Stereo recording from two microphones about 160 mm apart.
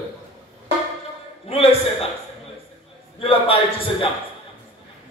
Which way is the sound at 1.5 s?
40° left (ahead or behind).